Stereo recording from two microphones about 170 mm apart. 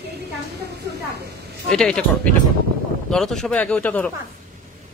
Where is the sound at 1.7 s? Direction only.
5° left (ahead or behind).